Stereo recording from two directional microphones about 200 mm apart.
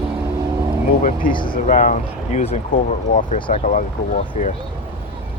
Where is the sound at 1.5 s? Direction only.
40° left (ahead or behind).